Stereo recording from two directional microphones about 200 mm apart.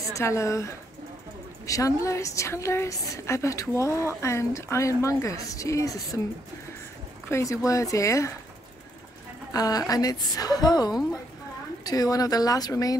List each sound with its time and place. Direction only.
0.1 s a woman's voice: 15° left (ahead or behind)
7.2 s a woman's voice: 15° left (ahead or behind)
9.5 s a woman's voice: 20° left (ahead or behind)